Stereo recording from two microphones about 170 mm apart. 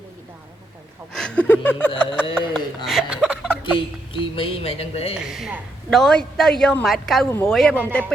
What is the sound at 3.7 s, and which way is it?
Speech, 30° left (ahead or behind).